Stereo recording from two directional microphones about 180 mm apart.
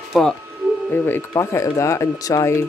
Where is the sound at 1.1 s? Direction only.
15° left (ahead or behind).